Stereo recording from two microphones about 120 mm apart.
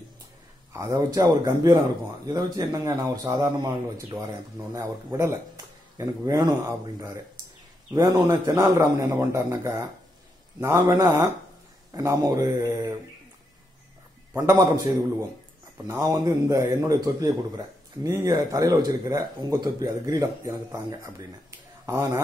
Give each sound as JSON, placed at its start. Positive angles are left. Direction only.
{"t": 0.7, "sound": "a man's voice", "side_deg": -30}
{"t": 7.9, "sound": "a man's voice", "side_deg": -25}
{"t": 14.3, "sound": "a man's voice", "side_deg": -25}